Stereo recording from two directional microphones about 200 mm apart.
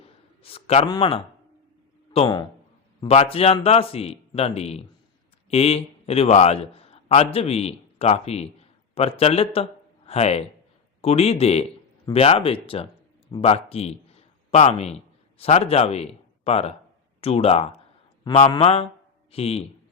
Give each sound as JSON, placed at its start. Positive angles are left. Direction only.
{"t": 0.4, "sound": "a man's voice", "side_deg": 30}